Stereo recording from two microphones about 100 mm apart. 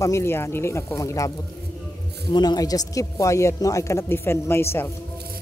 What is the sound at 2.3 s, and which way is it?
A man's voice, 45° left (ahead or behind).